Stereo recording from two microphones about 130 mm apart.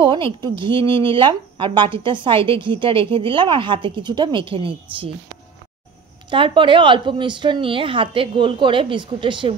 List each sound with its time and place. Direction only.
0.0 s speech: 35° right (ahead or behind)
6.3 s speech: 40° right (ahead or behind)